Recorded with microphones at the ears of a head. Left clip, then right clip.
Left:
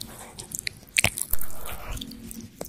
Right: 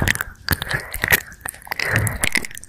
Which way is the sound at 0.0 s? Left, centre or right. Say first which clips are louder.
Right 19 dB; right.